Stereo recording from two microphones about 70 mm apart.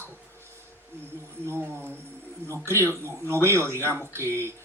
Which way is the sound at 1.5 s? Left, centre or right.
Right.